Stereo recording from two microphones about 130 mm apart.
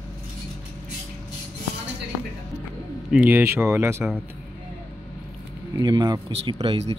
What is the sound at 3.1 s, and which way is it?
Speech, 15° right (ahead or behind).